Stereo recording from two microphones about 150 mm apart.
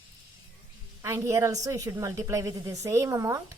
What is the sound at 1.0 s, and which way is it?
A woman's voice, 20° right (ahead or behind).